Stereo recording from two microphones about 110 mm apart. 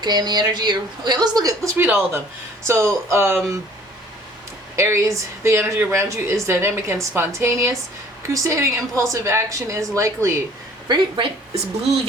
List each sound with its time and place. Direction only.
0.0 s a woman's voice: 40° right (ahead or behind)
1.7 s speech: 20° right (ahead or behind)
4.8 s speech: 25° right (ahead or behind)
10.8 s speech: 50° right (ahead or behind)